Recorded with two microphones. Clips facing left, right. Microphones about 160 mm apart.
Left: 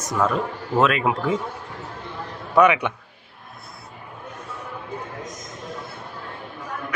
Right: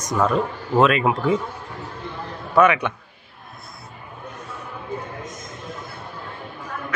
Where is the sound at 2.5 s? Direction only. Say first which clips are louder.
Even; 15° left (ahead or behind).